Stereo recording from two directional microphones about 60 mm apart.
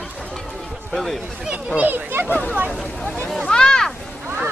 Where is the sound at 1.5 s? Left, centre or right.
Centre.